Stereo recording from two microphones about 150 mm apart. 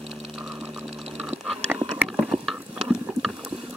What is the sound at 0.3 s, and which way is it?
Engine, centre (ahead or behind).